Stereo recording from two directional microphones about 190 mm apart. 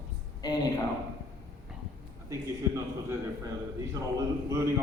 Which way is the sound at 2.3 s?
15° right (ahead or behind).